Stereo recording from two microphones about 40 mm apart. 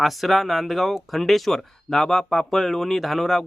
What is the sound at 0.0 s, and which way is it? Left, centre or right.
Speech, centre.